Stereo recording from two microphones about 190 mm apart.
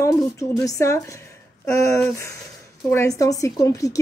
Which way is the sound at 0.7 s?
15° left (ahead or behind).